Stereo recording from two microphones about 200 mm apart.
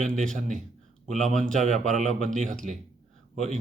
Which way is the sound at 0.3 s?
40° right (ahead or behind).